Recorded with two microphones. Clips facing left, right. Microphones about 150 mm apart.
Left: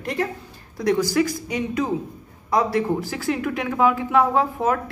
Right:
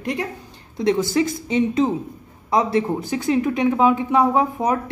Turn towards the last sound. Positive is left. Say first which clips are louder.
# right 1 dB
turn(degrees=-20)  # may be behind; listen again after turning